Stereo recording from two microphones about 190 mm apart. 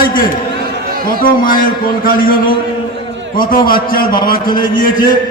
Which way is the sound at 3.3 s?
50° left (ahead or behind).